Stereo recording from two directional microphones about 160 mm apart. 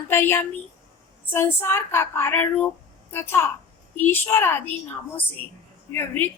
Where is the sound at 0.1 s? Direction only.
15° left (ahead or behind).